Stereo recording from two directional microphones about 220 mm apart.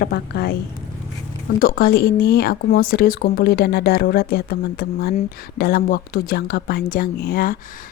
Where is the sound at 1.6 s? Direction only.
45° left (ahead or behind).